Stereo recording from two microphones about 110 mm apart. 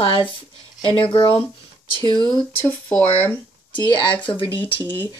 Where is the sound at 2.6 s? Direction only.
15° left (ahead or behind).